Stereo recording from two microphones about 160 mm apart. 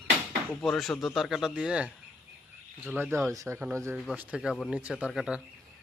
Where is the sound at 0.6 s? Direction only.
Centre (ahead or behind); by 3.9 s 15° right (ahead or behind).